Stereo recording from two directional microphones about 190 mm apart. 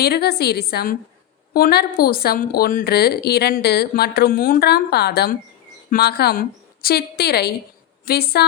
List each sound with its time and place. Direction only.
0.0 s a woman's voice: 55° left (ahead or behind)